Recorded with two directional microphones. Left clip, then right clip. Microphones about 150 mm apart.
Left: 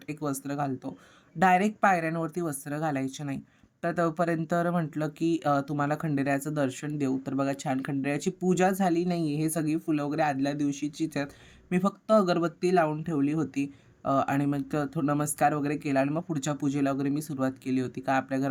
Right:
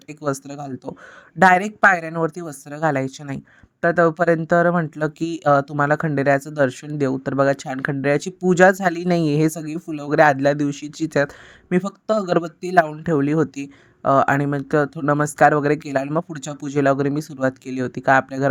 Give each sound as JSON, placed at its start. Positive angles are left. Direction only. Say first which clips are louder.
{"t": 0.1, "sound": "speech", "louder": "right 7 dB", "side_deg": -35}